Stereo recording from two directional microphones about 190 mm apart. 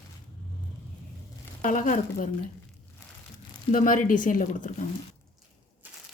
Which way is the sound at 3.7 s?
45° left (ahead or behind).